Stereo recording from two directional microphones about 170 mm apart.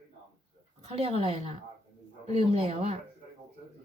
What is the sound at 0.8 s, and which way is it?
Speech, 35° right (ahead or behind).